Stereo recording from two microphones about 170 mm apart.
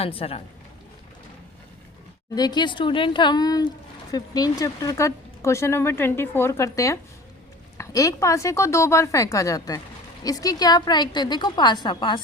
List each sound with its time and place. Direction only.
0.0 s a woman's voice: 35° left (ahead or behind)
2.3 s a woman's voice: 25° left (ahead or behind)